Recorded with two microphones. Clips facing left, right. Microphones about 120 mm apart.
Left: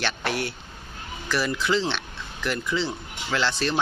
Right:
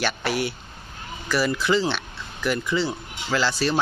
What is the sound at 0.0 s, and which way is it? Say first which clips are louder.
Speech: right 3 dB; 5° right (ahead or behind).